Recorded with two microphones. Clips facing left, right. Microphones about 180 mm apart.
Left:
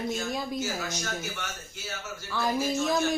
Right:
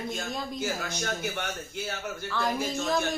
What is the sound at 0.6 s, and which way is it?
Speech, 55° right (ahead or behind).